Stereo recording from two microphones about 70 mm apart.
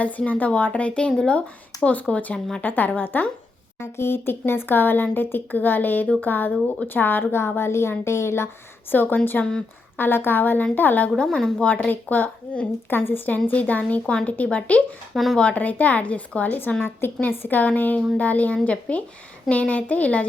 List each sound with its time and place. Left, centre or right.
0.0 s speech: left
3.8 s speech: left
8.9 s speech: left
9.4 s a woman's voice: centre
10.0 s speech: left
11.2 s a woman's voice: centre
11.6 s speech: left
15.1 s speech: centre
15.4 s speech: left